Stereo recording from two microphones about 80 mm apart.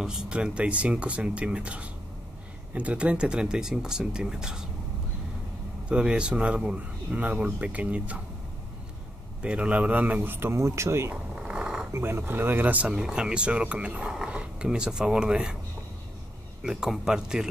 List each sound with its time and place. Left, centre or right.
0.0 s speech: centre
5.9 s speech: centre
9.4 s speech: centre; by 11.1 s right
11.3 s a sound: centre
11.9 s speech: right
12.9 s speech: centre
16.6 s speech: centre